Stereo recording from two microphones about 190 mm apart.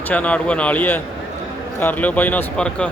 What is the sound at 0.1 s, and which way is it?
Speech, 5° left (ahead or behind).